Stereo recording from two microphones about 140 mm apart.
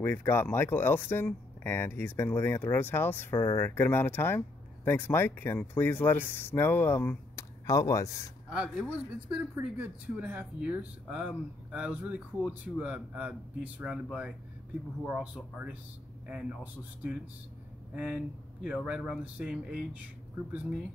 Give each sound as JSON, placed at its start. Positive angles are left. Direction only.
{"t": 0.0, "sound": "speech", "side_deg": 15}
{"t": 8.5, "sound": "speech", "side_deg": -5}
{"t": 15.0, "sound": "a man's voice", "side_deg": -5}
{"t": 17.9, "sound": "speech", "side_deg": -10}